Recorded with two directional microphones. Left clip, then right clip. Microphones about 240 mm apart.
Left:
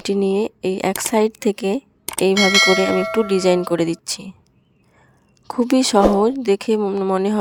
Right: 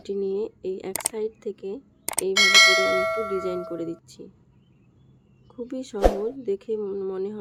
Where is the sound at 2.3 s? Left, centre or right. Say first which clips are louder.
Left 1 dB; centre.